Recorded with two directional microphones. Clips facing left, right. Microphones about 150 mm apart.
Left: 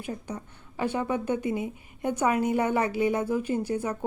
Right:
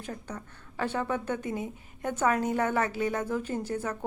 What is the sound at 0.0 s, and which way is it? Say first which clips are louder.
A woman's voice: left 4 dB; 10° left (ahead or behind).